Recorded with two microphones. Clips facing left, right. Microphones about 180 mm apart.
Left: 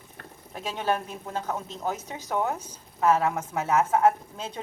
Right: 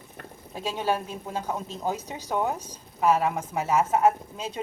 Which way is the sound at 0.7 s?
10° right (ahead or behind).